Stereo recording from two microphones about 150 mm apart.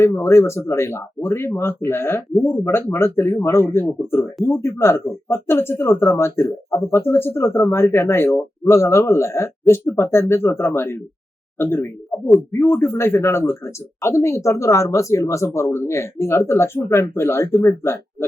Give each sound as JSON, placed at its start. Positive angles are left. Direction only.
{"t": 0.0, "sound": "speech", "side_deg": 20}